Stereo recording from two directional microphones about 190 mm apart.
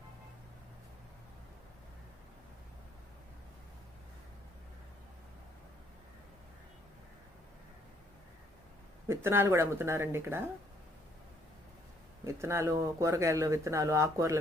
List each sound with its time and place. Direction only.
9.0 s speech: 15° right (ahead or behind)
12.2 s speech: 15° right (ahead or behind)